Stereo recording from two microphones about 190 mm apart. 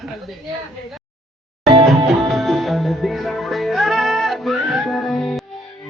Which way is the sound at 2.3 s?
Centre (ahead or behind).